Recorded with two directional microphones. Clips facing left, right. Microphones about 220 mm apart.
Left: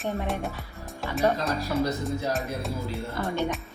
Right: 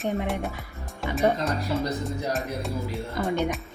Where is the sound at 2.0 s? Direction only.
Centre (ahead or behind).